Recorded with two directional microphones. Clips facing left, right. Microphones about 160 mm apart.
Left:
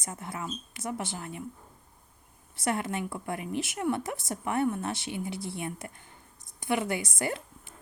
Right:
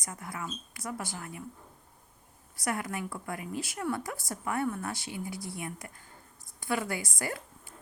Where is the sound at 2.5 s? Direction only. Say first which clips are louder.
Left 3 dB; 25° left (ahead or behind).